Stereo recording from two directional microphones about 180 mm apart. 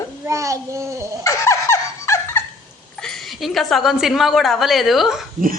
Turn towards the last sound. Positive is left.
turn(degrees=0)  # may be behind; listen again after turning